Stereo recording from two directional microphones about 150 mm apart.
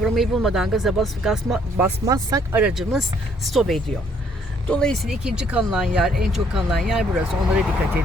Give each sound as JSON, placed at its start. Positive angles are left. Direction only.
{"t": 0.0, "sound": "speech", "side_deg": 0}
{"t": 2.0, "sound": "speech", "side_deg": -20}
{"t": 2.6, "sound": "speech", "side_deg": -5}